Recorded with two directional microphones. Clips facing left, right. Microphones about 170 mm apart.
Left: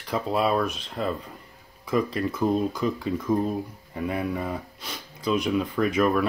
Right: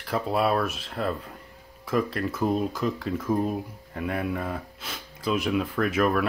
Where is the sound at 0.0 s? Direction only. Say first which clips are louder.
Even; 5° right (ahead or behind).